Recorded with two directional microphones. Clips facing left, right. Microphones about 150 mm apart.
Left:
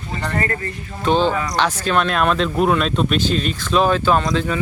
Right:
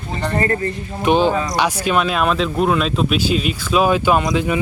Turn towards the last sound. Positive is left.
turn(degrees=-10)  # may be behind; listen again after turning